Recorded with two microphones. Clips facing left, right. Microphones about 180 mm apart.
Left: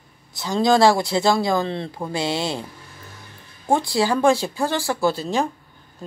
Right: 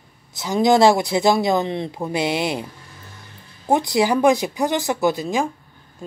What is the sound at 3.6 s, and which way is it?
Speech, 20° right (ahead or behind).